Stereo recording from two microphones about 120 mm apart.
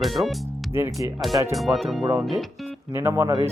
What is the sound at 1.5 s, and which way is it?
Speech, centre (ahead or behind).